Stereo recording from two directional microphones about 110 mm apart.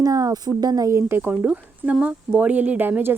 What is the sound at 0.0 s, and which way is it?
Speech, 30° right (ahead or behind).